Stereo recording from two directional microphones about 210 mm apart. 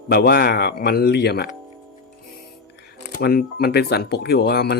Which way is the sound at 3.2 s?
45° left (ahead or behind).